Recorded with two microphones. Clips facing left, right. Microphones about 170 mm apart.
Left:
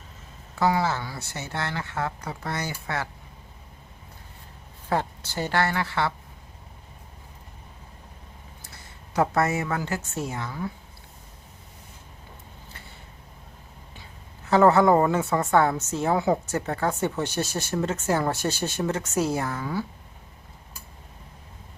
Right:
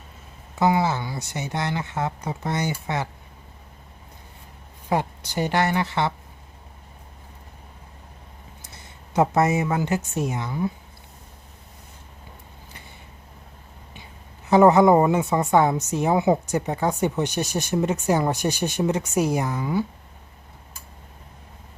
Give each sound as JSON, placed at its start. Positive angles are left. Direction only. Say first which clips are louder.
{"t": 0.6, "sound": "speech", "louder": "right 3 dB", "side_deg": -20}
{"t": 4.9, "sound": "a woman's voice", "louder": "right 2 dB", "side_deg": -15}
{"t": 8.6, "sound": "a woman's voice", "louder": "right 1 dB", "side_deg": -20}
{"t": 13.9, "sound": "a woman's voice", "louder": "right 2 dB", "side_deg": -20}